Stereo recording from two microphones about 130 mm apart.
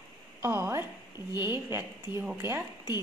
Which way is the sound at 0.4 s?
20° right (ahead or behind).